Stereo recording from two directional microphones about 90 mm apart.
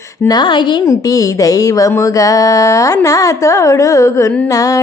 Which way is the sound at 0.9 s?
40° left (ahead or behind).